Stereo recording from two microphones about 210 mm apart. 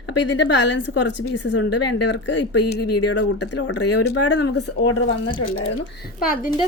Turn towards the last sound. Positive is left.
turn(degrees=40)  # may be behind; listen again after turning